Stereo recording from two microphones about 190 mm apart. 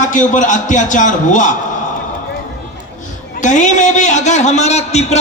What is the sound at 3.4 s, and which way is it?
A man's voice, 40° left (ahead or behind).